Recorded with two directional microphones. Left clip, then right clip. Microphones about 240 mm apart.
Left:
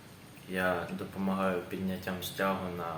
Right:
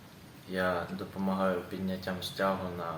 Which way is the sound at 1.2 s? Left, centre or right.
Centre.